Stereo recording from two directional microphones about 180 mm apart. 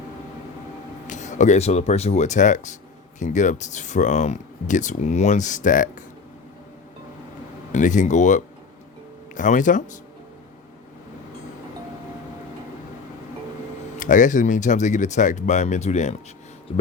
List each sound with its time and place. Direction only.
1.0 s speech: 40° left (ahead or behind)
7.7 s speech: 45° left (ahead or behind)
14.0 s speech: 45° left (ahead or behind)